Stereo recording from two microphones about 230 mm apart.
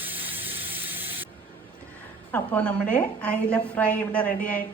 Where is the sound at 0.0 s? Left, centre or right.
Centre.